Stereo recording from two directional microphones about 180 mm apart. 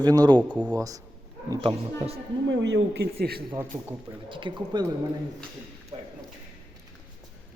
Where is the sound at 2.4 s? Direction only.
80° right.